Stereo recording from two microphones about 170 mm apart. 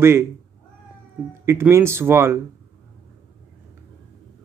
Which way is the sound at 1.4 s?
15° right (ahead or behind).